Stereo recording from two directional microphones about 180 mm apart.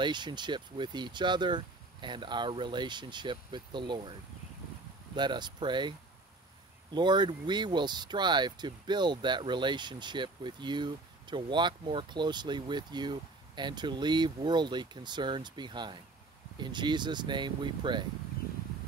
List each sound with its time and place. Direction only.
0.0 s speech: 25° right (ahead or behind)